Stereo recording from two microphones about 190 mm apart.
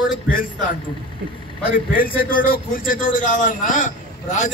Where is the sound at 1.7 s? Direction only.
50° left (ahead or behind).